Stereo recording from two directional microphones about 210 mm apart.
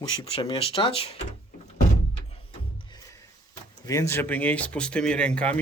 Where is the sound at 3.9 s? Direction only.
15° left (ahead or behind).